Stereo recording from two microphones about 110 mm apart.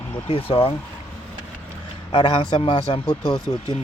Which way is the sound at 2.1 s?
50° left (ahead or behind).